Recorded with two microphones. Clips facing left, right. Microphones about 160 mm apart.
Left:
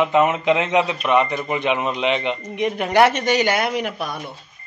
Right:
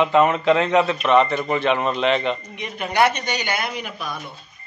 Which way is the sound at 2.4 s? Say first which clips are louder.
Left 8 dB; 80° left.